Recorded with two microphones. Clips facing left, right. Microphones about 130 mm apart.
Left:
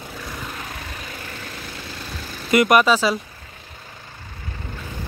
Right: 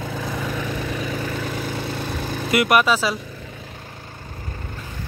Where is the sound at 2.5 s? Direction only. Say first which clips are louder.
Left 2 dB; 5° right (ahead or behind).